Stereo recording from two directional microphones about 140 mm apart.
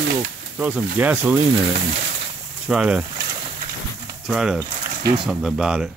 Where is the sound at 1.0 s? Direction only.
10° right (ahead or behind).